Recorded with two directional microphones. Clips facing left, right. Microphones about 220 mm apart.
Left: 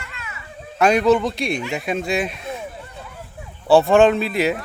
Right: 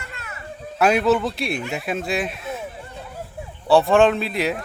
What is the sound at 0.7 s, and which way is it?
Speech, 5° right (ahead or behind).